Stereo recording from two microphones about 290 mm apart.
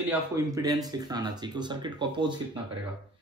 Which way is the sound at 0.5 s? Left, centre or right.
Centre.